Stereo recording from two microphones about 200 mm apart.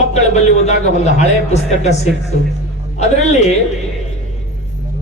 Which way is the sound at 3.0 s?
35° left (ahead or behind).